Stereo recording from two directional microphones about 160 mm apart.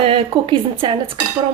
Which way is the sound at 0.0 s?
35° right (ahead or behind).